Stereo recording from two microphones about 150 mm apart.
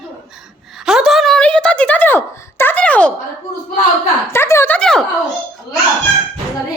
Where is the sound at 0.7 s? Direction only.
5° right (ahead or behind).